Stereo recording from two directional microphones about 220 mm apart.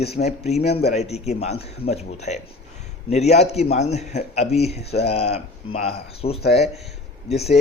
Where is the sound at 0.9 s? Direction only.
30° left (ahead or behind).